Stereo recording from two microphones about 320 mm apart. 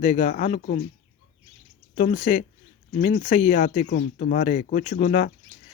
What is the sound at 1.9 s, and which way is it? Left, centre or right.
Speech, left.